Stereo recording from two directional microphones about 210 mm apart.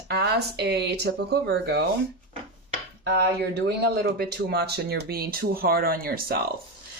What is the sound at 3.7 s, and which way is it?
A woman's voice, 50° right (ahead or behind).